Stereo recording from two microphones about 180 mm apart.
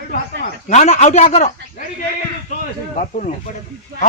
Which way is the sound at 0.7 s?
40° left (ahead or behind).